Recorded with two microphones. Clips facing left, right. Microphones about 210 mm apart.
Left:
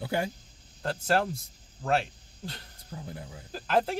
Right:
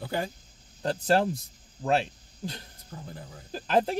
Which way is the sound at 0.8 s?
20° right (ahead or behind).